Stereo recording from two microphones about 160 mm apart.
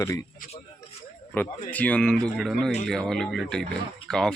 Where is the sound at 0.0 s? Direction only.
20° left (ahead or behind).